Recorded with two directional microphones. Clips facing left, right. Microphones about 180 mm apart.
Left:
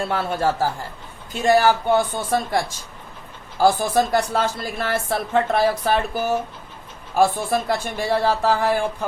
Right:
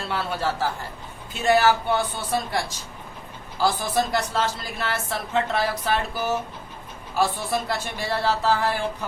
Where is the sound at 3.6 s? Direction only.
50° left (ahead or behind).